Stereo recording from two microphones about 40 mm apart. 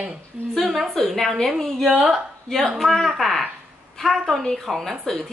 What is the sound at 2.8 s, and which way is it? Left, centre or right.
A woman's voice, centre.